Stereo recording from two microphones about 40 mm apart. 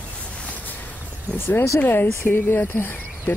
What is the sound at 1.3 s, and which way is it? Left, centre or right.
Speech, left.